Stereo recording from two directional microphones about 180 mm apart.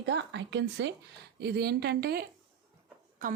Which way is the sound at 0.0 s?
80° right.